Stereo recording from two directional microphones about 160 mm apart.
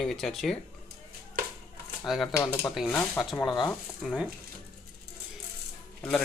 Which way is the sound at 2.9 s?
Centre (ahead or behind).